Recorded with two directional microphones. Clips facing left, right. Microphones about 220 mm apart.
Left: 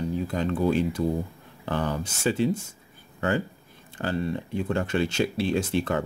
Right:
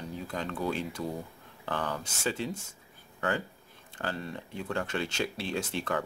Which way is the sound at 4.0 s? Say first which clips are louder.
Left 6 dB; 20° left (ahead or behind).